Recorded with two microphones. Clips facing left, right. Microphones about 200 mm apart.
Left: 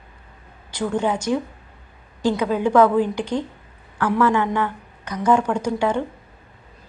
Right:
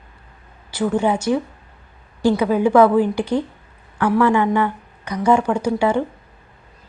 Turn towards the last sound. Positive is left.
turn(degrees=-10)  # may be behind; listen again after turning